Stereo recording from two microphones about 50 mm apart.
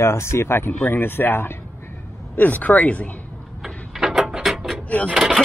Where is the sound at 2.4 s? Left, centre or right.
Left.